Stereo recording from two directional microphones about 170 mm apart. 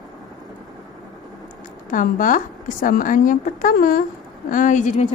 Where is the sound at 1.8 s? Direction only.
50° left (ahead or behind).